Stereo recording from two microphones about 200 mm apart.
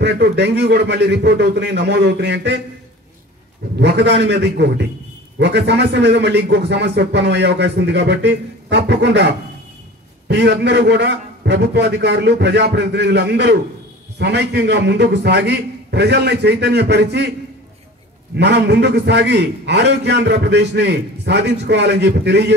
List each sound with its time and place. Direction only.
0.0 s a man's voice: 60° right (ahead or behind)
3.7 s a man's voice: 55° right (ahead or behind)
18.3 s a man's voice: 60° right (ahead or behind)